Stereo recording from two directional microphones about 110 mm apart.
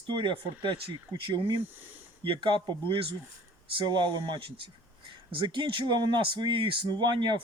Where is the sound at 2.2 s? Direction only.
50° right (ahead or behind).